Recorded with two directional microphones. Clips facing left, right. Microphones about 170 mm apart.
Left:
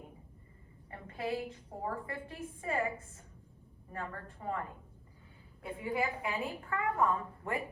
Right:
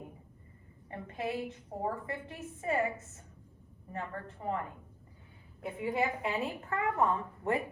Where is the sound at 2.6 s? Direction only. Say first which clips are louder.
Right 3 dB; 30° right (ahead or behind).